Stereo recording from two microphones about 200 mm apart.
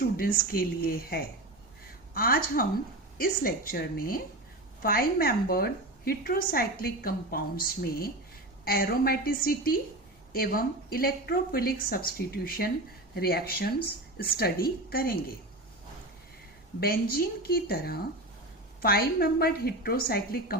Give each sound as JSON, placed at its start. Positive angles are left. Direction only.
{"t": 0.0, "sound": "a woman's voice", "side_deg": 45}
{"t": 16.8, "sound": "a woman's voice", "side_deg": 50}